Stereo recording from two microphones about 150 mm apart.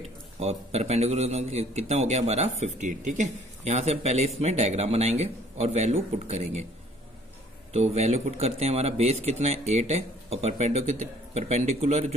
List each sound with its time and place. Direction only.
0.0 s a man's voice: 45° right (ahead or behind)
7.7 s a man's voice: 45° right (ahead or behind)